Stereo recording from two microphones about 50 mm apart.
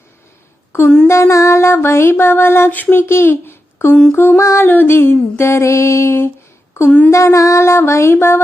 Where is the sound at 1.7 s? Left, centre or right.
Left.